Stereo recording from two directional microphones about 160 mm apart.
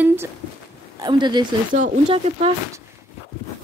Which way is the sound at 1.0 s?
25° right (ahead or behind).